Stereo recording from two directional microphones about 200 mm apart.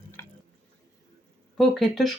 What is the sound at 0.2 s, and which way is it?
Drip, 10° left (ahead or behind).